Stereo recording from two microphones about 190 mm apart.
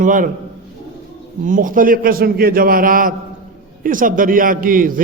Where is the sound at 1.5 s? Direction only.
45° right (ahead or behind).